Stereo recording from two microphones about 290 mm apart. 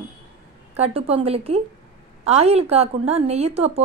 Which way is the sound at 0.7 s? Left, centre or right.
Right.